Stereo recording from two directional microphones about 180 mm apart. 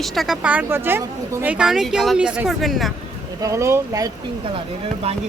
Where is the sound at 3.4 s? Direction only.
15° right (ahead or behind).